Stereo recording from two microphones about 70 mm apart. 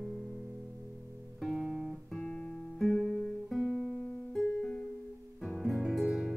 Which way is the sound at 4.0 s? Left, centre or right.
Centre.